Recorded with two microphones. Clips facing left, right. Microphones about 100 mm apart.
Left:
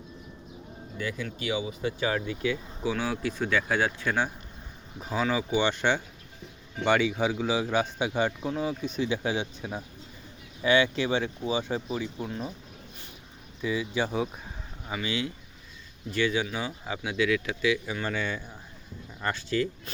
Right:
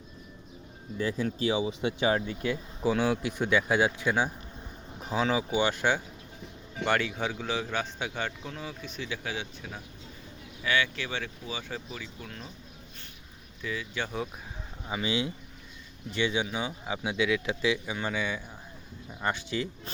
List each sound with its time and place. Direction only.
0.9 s speech: 35° right (ahead or behind)
2.2 s speech: 40° right (ahead or behind)
2.9 s speech: 20° right (ahead or behind)
5.4 s a man's voice: 10° right (ahead or behind); by 12.5 s 15° left (ahead or behind)
13.6 s a man's voice: 15° left (ahead or behind)
14.8 s speech: 20° right (ahead or behind)
17.8 s speech: 15° right (ahead or behind)